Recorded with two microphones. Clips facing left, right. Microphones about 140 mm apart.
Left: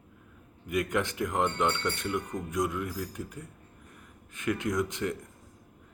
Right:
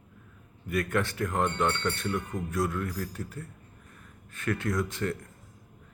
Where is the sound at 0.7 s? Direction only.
20° left (ahead or behind).